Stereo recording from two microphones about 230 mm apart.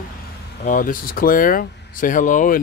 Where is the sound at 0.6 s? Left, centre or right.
Left.